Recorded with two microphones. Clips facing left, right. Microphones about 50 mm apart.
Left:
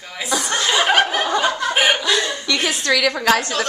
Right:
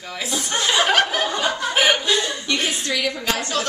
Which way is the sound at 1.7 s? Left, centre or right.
Centre.